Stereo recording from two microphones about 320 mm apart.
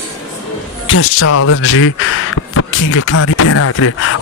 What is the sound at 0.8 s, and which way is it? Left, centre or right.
Speech, left.